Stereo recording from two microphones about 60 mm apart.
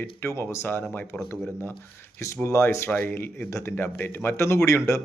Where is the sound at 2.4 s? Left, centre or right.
Left.